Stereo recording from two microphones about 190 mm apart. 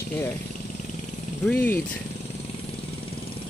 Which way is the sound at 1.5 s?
10° left (ahead or behind).